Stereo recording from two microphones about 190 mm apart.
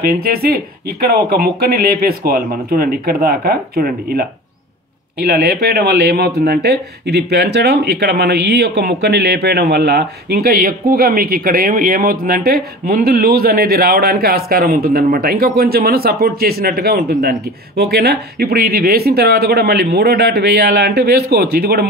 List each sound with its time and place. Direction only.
0.0 s speech: 55° right (ahead or behind)